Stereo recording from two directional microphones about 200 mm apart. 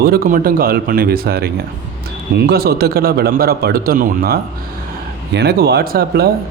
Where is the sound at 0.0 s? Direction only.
50° right (ahead or behind).